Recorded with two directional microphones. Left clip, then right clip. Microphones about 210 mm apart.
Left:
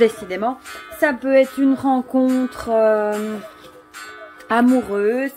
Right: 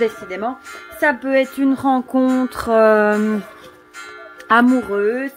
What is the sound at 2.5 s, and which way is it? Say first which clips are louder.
Speech: right 5 dB; 20° right (ahead or behind).